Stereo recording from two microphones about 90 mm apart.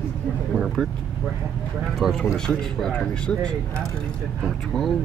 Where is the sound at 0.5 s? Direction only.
Centre (ahead or behind).